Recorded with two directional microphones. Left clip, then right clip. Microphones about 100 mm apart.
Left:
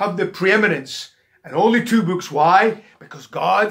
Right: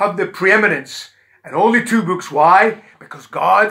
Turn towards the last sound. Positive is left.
turn(degrees=10)  # may be behind; listen again after turning